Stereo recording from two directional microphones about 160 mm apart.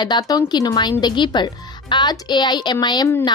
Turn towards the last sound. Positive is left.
turn(degrees=25)  # may be behind; listen again after turning